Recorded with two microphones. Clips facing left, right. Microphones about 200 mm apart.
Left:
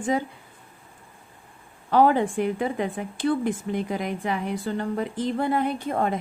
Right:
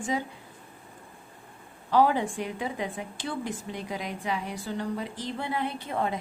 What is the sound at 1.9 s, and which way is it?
A woman's voice, 55° left (ahead or behind).